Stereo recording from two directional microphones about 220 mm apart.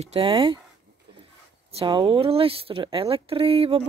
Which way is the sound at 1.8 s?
25° right (ahead or behind).